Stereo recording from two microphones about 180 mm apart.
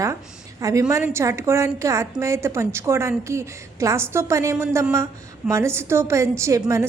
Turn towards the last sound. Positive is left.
turn(degrees=-15)  # may be behind; listen again after turning